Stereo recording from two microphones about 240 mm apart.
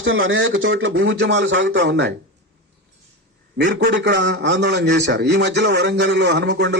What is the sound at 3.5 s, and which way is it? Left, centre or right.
Speech, right.